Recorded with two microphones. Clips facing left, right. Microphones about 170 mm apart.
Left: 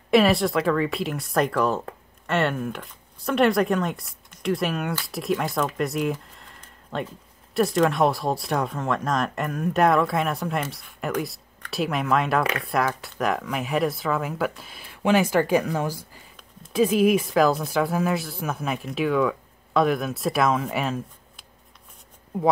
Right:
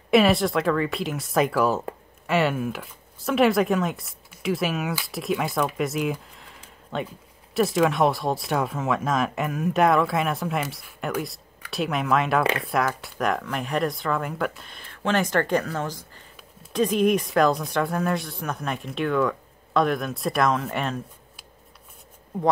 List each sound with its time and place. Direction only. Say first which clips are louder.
0.1 s speech: even; centre (ahead or behind)
6.1 s a sound: even; centre (ahead or behind)
7.5 s speech: even; centre (ahead or behind)